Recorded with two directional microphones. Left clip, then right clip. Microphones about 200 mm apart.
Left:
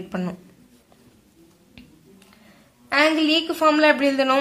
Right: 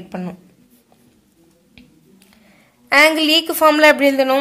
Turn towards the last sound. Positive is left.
turn(degrees=-15)  # may be behind; listen again after turning